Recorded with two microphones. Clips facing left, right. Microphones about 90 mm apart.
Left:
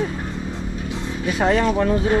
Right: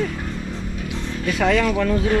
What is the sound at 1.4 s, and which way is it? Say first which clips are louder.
Speech: left 1 dB; 25° left (ahead or behind).